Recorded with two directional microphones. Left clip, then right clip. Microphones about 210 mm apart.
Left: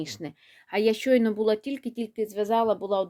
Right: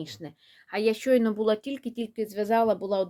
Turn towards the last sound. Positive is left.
turn(degrees=5)  # may be behind; listen again after turning